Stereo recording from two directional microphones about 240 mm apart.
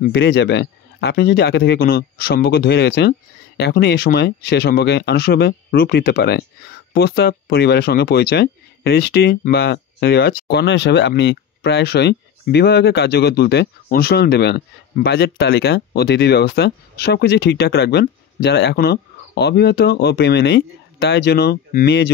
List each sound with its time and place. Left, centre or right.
0.0 s speech: left